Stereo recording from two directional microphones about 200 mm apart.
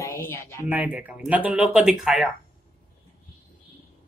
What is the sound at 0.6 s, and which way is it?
Speech, 5° right (ahead or behind).